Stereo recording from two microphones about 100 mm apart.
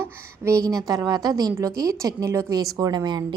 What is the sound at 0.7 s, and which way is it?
A woman's voice, 40° right (ahead or behind).